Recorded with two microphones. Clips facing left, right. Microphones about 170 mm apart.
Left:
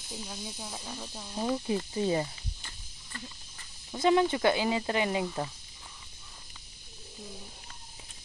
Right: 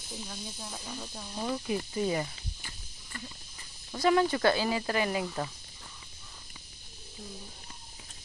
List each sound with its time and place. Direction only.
0.3 s speech: 10° left (ahead or behind)
1.3 s speech: 20° left (ahead or behind)
3.9 s speech: 20° left (ahead or behind)